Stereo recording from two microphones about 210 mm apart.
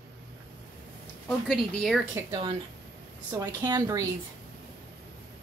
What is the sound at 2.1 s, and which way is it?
Speech, 20° right (ahead or behind).